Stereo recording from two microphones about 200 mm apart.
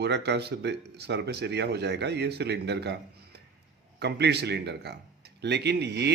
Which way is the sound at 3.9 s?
55° right (ahead or behind).